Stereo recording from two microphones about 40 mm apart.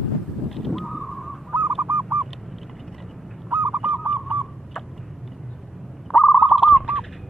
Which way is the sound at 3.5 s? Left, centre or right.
Right.